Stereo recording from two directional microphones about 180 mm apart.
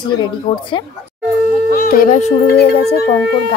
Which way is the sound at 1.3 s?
5° right (ahead or behind).